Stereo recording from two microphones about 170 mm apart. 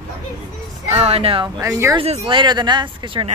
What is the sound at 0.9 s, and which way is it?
Speech, 35° right (ahead or behind).